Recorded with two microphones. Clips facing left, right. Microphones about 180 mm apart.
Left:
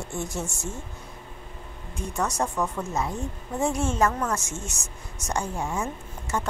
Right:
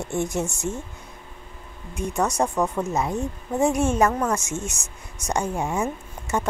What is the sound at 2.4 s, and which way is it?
Speech, 35° right (ahead or behind).